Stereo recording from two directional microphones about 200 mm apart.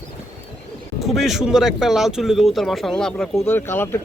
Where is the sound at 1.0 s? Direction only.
Centre (ahead or behind).